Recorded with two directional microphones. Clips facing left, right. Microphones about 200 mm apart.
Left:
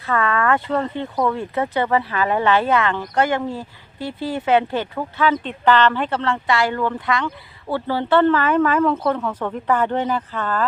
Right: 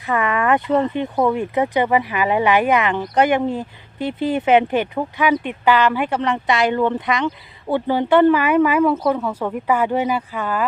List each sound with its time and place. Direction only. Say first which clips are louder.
0.0 s speech: right 1 dB; 15° right (ahead or behind)